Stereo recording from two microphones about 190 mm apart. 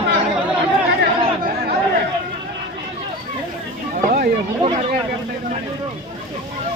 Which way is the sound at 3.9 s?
50° right (ahead or behind).